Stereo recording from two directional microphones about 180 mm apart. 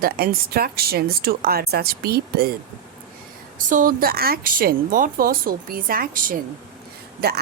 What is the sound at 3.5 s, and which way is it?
A woman's voice, 50° right (ahead or behind).